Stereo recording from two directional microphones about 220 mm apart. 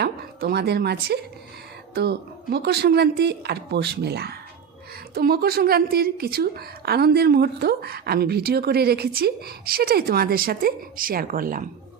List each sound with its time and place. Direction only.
0.0 s a woman's voice: 45° right (ahead or behind)